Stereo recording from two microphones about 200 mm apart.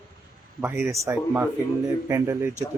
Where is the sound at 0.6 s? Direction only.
10° right (ahead or behind).